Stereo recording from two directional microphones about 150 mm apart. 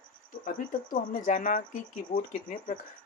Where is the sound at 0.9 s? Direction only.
60° left (ahead or behind).